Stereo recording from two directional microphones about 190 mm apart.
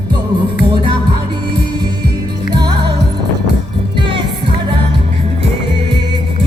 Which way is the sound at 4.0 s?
25° right (ahead or behind).